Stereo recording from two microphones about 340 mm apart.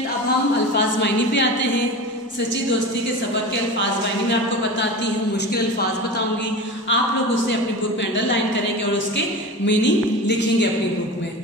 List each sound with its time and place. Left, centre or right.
0.7 s speech: left
6.9 s speech: left
9.7 s speech: left